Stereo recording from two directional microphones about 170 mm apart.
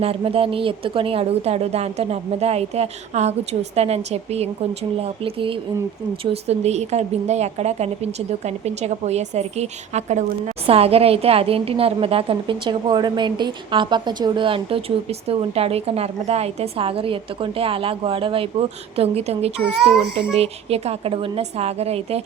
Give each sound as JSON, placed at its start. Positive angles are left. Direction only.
{"t": 0.0, "sound": "a woman's voice", "side_deg": -35}